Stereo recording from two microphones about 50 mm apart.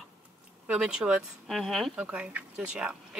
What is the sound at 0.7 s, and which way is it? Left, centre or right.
Speech, centre.